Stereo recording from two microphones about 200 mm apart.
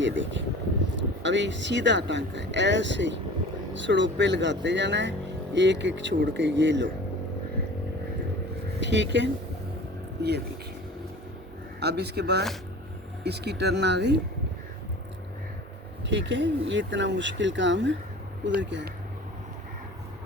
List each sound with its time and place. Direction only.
0.0 s speech: 65° right (ahead or behind)
8.8 s speech: 60° right (ahead or behind)
11.8 s speech: 55° right (ahead or behind)
16.0 s speech: 60° right (ahead or behind)